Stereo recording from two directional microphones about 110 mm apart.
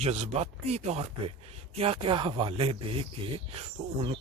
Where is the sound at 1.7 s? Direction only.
60° right (ahead or behind).